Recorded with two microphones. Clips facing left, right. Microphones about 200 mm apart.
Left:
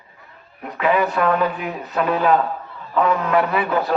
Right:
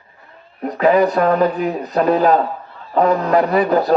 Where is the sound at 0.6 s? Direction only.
40° right (ahead or behind).